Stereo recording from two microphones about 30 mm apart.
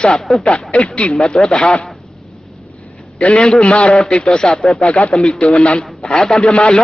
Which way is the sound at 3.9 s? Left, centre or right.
Left.